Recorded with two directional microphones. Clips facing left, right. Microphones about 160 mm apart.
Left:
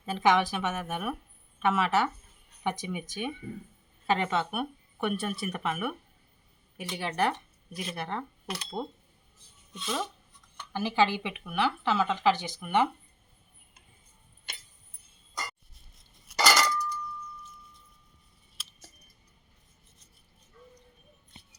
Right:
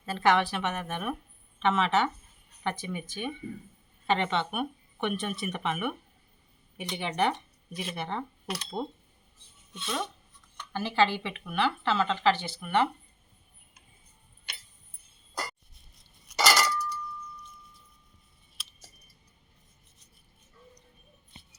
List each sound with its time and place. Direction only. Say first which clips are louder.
0.0 s speech: even; 15° left (ahead or behind)
14.5 s a sound: left 1 dB; 45° left (ahead or behind)
16.3 s dishes: even; 10° right (ahead or behind)